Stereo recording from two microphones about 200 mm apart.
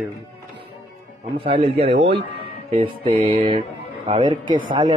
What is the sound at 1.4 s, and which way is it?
Speech, 30° right (ahead or behind).